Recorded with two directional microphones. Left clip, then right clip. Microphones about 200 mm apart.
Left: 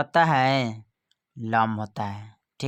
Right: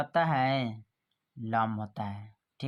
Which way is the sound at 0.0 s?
45° left (ahead or behind).